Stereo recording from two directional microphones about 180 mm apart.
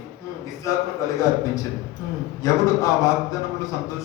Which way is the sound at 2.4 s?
15° left (ahead or behind).